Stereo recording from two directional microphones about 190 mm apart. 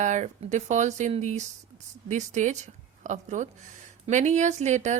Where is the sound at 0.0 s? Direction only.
40° right (ahead or behind).